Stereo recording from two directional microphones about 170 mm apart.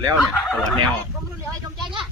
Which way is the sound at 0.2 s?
Centre (ahead or behind).